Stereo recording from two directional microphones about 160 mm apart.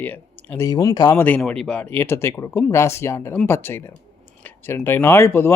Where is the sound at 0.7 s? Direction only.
25° left (ahead or behind).